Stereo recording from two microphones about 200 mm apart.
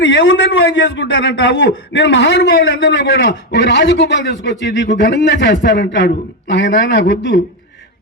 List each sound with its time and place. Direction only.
0.0 s a man's voice: 70° left (ahead or behind)